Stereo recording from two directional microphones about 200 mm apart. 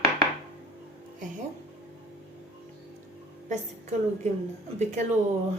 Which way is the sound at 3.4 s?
35° right (ahead or behind).